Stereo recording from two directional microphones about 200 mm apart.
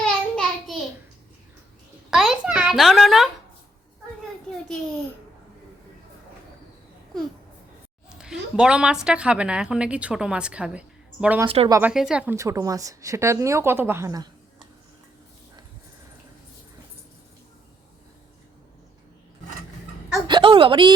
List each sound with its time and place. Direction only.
0.0 s a sound: 5° left (ahead or behind)
2.0 s a sound: centre (ahead or behind)
8.1 s a woman's voice: 5° right (ahead or behind)
11.4 s a woman's voice: 30° right (ahead or behind)
11.7 s a woman's voice: 5° right (ahead or behind)
20.2 s a woman's voice: 25° right (ahead or behind)